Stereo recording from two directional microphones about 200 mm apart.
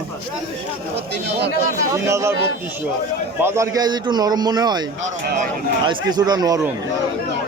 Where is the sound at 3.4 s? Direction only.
15° right (ahead or behind).